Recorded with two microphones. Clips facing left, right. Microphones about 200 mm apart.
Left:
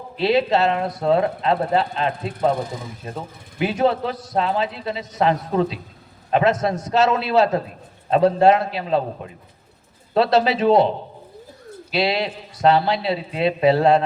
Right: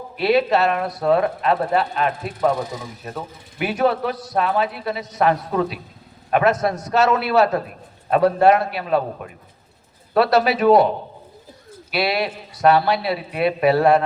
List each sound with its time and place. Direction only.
0.2 s a man's voice: 25° left (ahead or behind)